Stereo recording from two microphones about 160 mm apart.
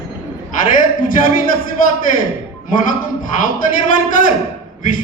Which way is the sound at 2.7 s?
55° left (ahead or behind).